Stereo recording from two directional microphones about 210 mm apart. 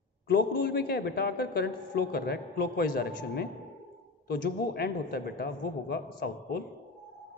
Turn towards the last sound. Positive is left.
turn(degrees=45)  # may be behind; listen again after turning